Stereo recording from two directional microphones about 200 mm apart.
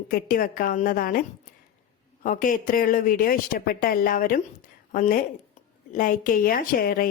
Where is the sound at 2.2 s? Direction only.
40° left (ahead or behind).